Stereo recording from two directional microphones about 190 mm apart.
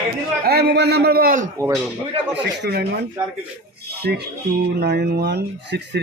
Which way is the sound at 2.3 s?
65° right (ahead or behind).